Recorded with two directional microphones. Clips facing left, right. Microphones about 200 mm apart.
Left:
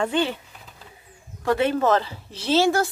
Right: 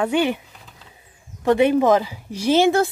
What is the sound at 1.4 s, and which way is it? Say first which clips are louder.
Speech: right 5 dB; 15° right (ahead or behind).